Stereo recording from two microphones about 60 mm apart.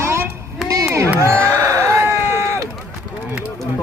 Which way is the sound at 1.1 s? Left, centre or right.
Right.